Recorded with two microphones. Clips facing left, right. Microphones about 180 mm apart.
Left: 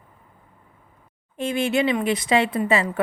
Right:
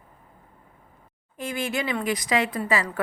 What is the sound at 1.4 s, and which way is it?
Speech, 25° left (ahead or behind).